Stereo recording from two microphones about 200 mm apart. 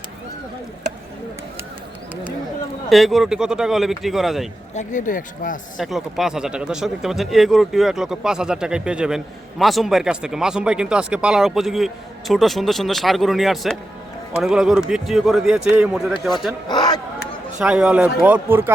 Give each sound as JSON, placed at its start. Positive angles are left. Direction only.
{"t": 2.9, "sound": "speech", "side_deg": 0}
{"t": 4.7, "sound": "speech", "side_deg": 40}
{"t": 5.7, "sound": "speech", "side_deg": 0}
{"t": 16.6, "sound": "speech", "side_deg": 20}
{"t": 17.6, "sound": "speech", "side_deg": -5}